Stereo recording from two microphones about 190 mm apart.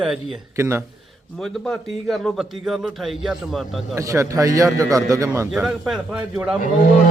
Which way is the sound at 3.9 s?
15° right (ahead or behind).